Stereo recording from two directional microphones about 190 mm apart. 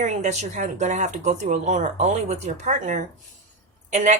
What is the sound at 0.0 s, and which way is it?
Speech, 40° right (ahead or behind).